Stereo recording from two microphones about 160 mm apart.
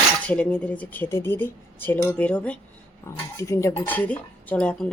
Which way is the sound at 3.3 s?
20° left (ahead or behind).